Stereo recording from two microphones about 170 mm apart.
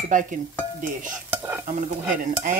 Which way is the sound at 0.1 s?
50° right (ahead or behind).